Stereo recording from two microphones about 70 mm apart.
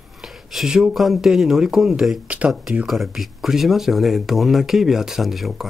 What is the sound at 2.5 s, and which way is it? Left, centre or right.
Speech, centre.